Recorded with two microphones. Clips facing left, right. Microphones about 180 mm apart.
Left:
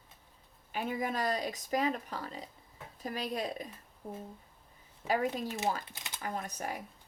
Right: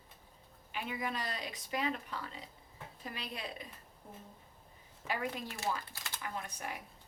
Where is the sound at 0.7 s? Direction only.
45° left (ahead or behind).